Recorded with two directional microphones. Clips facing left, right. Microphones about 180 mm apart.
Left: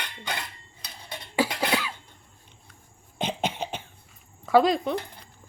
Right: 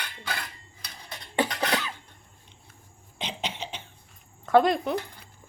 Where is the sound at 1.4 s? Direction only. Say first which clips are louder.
Left 1 dB; 5° left (ahead or behind).